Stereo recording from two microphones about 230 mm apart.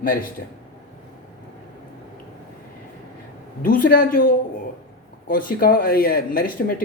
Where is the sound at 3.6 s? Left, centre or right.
Left.